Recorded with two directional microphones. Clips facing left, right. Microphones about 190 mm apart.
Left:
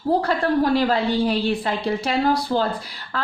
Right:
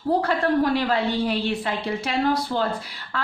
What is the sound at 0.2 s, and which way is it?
A woman's voice, 35° left (ahead or behind).